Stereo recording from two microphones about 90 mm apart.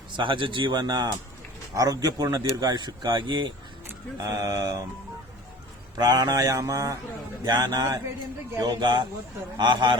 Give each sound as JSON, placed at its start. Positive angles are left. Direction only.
{"t": 0.2, "sound": "speech", "side_deg": -65}
{"t": 4.2, "sound": "mantra", "side_deg": -40}
{"t": 6.0, "sound": "mantra", "side_deg": -50}
{"t": 7.4, "sound": "speech", "side_deg": -45}